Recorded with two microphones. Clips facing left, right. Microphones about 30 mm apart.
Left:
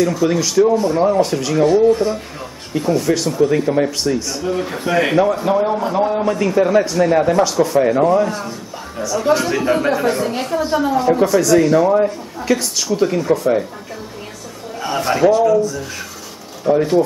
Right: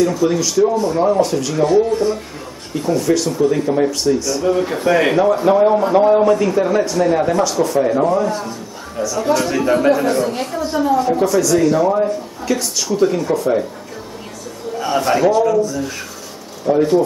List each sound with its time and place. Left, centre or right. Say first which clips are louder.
0.0 s a man's voice: even; centre
4.4 s a man's voice: right 4 dB; centre
6.3 s a man's voice: left 1 dB; centre
8.3 s a man's voice: right 2 dB; centre
14.8 s a man's voice: right 1 dB; centre
16.6 s a man's voice: even; centre